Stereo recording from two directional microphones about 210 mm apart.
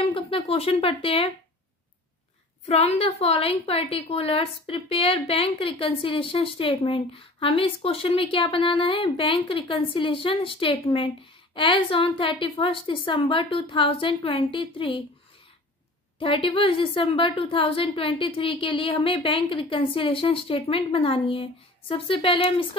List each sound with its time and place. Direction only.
0.0 s a woman's voice: 25° left (ahead or behind)
2.6 s a woman's voice: 30° left (ahead or behind)
16.2 s a woman's voice: 25° left (ahead or behind)